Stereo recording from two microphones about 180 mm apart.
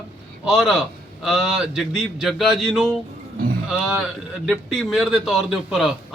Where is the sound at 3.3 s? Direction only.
55° right (ahead or behind).